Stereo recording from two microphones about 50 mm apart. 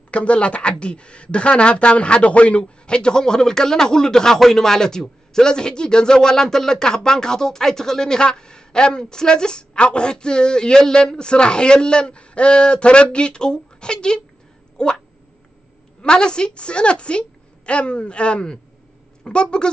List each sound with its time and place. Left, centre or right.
0.1 s speech: left
16.0 s a woman's voice: centre